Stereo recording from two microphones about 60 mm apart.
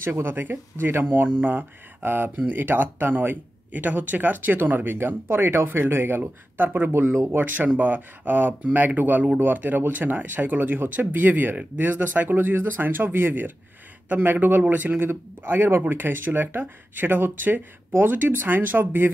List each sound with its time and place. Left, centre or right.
0.0 s speech: right